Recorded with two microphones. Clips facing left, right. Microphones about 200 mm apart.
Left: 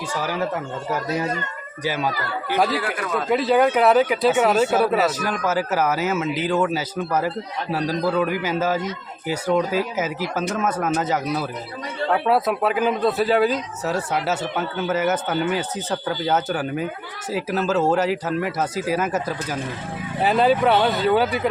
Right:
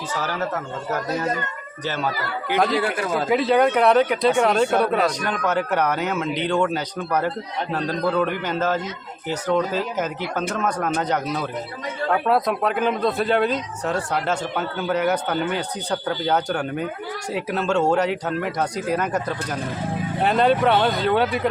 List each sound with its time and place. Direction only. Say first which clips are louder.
0.1 s speech: left 1 dB; 10° left (ahead or behind)
1.8 s speech: left 2 dB; 10° left (ahead or behind)
2.7 s a man's voice: right 2 dB; 30° right (ahead or behind)
3.2 s speech: left 1 dB; centre (ahead or behind)